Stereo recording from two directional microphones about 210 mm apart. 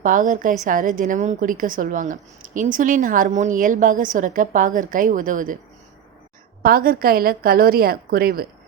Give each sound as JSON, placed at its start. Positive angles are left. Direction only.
{"t": 0.0, "sound": "a woman's voice", "side_deg": -40}
{"t": 6.6, "sound": "a woman's voice", "side_deg": -45}